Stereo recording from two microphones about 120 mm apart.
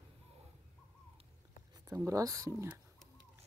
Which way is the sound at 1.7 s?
25° right (ahead or behind).